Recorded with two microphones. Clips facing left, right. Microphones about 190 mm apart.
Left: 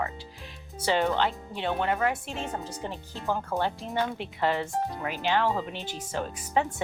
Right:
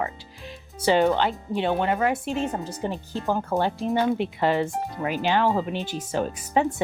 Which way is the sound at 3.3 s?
25° right (ahead or behind).